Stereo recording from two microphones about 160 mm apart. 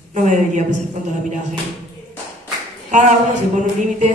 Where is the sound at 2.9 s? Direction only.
50° right (ahead or behind).